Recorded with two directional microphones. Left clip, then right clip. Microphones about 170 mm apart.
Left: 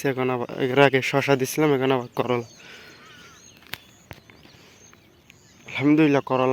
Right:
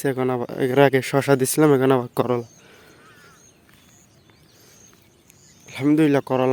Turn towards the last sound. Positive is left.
turn(degrees=-40)  # may be behind; listen again after turning